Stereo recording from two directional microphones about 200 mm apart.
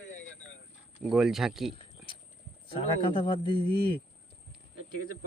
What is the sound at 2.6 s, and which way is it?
A man's voice, 25° left (ahead or behind).